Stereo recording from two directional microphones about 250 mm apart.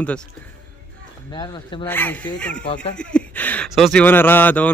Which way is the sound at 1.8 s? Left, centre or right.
Centre.